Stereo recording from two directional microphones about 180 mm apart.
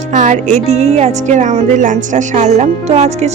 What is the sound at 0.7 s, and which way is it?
A woman's voice, 35° right (ahead or behind).